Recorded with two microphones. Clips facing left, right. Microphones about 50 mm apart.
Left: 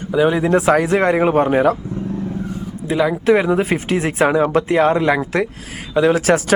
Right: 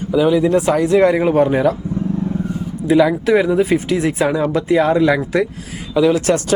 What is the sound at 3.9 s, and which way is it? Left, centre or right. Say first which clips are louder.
Speech: left 1 dB; left.